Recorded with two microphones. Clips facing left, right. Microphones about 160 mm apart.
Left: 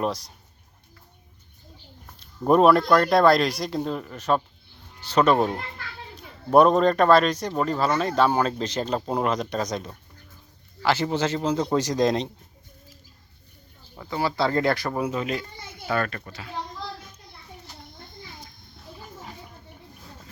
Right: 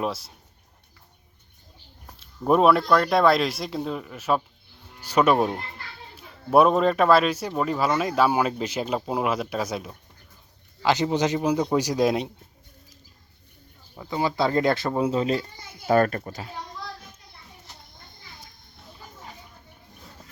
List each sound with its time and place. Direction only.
0.0 s speech: 5° right (ahead or behind)
2.1 s speech: centre (ahead or behind)
10.8 s speech: 15° right (ahead or behind)
14.1 s speech: 20° right (ahead or behind)
15.9 s speech: 40° right (ahead or behind)